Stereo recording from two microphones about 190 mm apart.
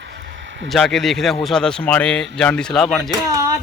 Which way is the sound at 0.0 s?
60° right (ahead or behind).